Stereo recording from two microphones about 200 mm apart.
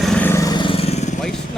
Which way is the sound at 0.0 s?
5° left (ahead or behind).